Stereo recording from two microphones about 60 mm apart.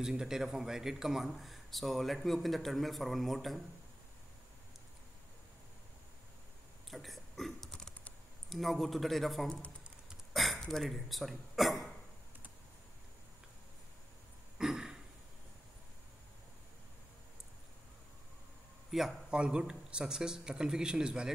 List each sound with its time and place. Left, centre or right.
0.0 s a man's voice: centre
6.9 s a sound: centre
8.5 s a man's voice: centre
14.6 s a sound: centre
18.9 s a man's voice: centre
19.3 s speech: centre